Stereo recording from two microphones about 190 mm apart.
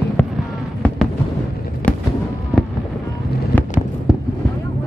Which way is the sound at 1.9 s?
5° left (ahead or behind).